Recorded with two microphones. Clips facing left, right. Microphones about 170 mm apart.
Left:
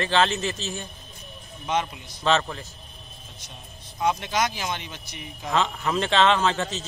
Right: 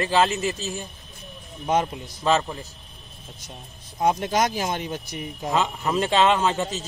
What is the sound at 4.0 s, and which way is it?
Speech, 45° right (ahead or behind).